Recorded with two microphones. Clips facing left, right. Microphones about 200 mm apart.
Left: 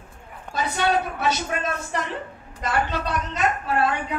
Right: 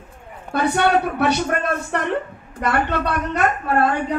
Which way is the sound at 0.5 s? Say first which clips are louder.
Right 6 dB; 60° right (ahead or behind).